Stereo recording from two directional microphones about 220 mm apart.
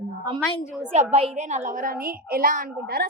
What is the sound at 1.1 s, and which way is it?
A woman's voice, 30° right (ahead or behind).